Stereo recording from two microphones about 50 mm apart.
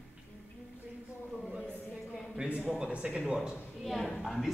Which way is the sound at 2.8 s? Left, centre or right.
Right.